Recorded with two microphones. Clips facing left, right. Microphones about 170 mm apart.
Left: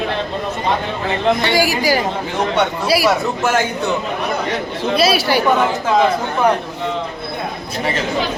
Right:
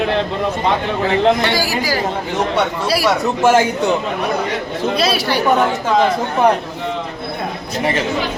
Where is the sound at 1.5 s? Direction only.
15° left (ahead or behind).